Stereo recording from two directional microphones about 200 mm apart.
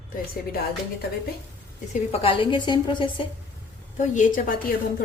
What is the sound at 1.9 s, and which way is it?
A woman's voice, 30° left (ahead or behind).